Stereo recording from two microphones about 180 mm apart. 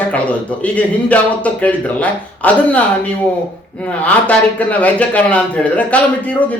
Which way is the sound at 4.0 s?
10° left (ahead or behind).